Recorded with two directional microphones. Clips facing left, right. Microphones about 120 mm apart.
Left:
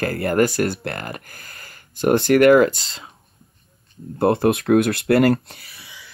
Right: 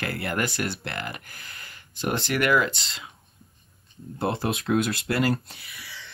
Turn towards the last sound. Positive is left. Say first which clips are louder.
# left 8 dB
turn(degrees=55)  # may be behind; listen again after turning